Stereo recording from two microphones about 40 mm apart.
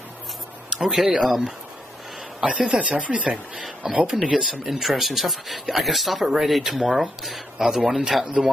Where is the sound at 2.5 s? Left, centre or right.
Right.